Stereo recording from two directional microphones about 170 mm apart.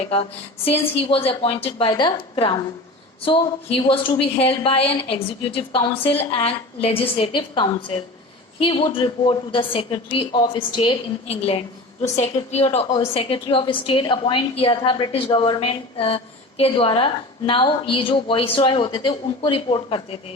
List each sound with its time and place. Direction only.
0.1 s a woman's voice: 35° left (ahead or behind)